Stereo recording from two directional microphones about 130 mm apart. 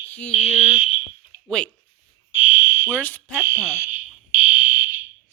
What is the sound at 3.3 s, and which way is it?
Speech, 20° right (ahead or behind).